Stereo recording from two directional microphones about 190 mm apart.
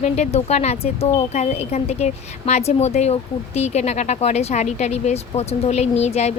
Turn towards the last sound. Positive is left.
turn(degrees=35)  # may be behind; listen again after turning